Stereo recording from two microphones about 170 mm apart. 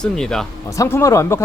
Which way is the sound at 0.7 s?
15° left (ahead or behind).